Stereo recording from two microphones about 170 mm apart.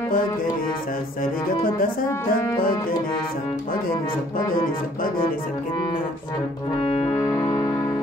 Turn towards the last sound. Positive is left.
turn(degrees=40)  # may be behind; listen again after turning